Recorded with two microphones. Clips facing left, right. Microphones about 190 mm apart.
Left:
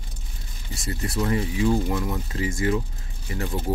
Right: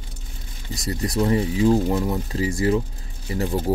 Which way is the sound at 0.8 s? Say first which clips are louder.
Right 4 dB; 35° right (ahead or behind).